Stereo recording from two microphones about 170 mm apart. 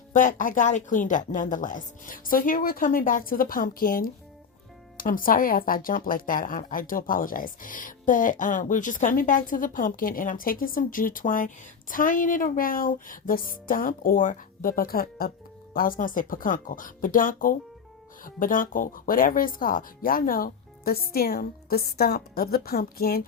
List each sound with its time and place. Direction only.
0.1 s speech: 50° left (ahead or behind)